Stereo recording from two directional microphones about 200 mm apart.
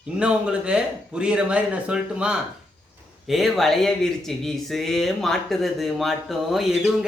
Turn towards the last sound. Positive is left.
turn(degrees=0)  # may be behind; listen again after turning